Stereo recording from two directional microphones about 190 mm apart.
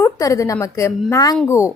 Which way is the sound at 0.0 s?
15° left (ahead or behind).